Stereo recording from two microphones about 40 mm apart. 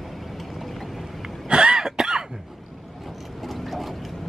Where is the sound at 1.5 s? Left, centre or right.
Right.